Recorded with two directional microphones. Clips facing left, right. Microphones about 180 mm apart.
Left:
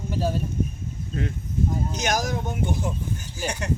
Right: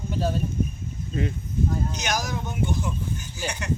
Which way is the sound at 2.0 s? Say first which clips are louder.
Left 3 dB; 50° left (ahead or behind).